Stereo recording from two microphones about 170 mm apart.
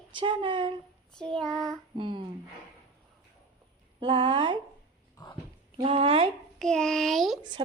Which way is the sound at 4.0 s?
30° right (ahead or behind).